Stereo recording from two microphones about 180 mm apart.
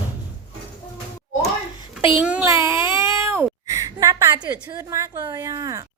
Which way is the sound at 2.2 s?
5° right (ahead or behind).